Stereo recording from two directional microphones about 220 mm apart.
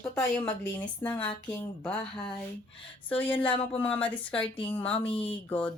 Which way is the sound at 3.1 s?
25° left (ahead or behind).